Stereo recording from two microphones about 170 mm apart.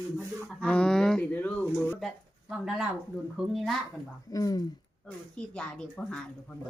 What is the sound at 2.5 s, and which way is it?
Speech, 5° right (ahead or behind).